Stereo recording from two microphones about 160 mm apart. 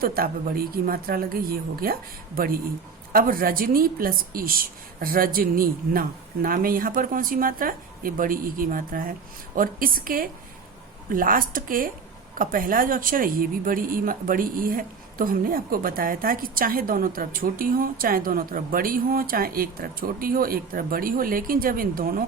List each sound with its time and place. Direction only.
0.0 s a woman's voice: 65° right (ahead or behind)